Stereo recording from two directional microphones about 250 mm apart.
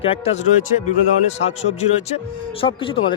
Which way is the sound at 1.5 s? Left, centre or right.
Left.